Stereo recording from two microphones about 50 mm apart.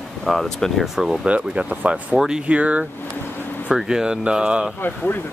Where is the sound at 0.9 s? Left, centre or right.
Centre.